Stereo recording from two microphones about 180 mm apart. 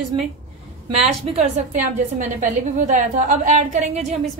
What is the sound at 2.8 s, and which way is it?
A woman's voice, 40° right (ahead or behind).